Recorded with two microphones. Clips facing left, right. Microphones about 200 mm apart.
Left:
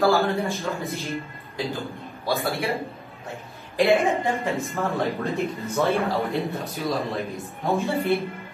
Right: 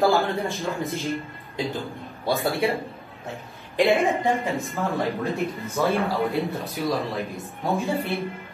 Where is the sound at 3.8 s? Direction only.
Centre (ahead or behind).